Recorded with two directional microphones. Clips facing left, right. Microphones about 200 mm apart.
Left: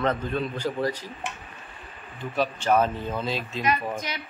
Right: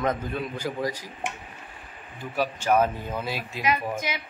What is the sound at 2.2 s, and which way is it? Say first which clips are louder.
Speech: left 1 dB; 10° right (ahead or behind).